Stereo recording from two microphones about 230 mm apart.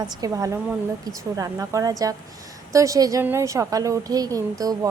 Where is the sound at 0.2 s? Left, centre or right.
Centre.